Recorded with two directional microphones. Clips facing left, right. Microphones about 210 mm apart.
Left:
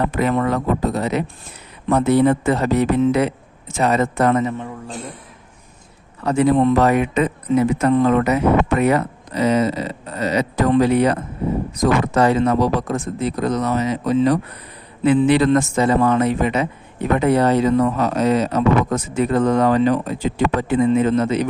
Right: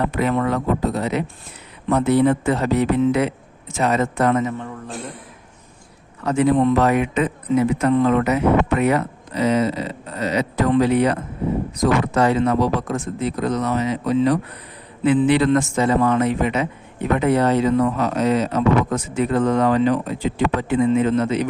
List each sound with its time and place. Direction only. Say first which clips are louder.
0.1 s speech: left 1 dB; 45° left (ahead or behind)
4.5 s a man's voice: left 1 dB; 15° left (ahead or behind)
6.2 s speech: left 1 dB; 35° left (ahead or behind)